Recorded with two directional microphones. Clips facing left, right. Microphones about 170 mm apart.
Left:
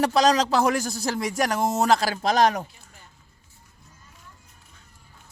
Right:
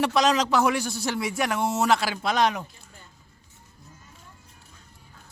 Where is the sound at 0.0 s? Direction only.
35° left (ahead or behind).